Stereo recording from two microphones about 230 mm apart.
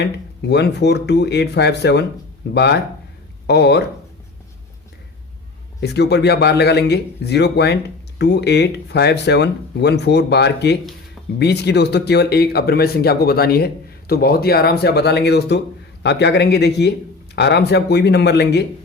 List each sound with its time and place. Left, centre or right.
0.0 s speech: left
5.8 s speech: left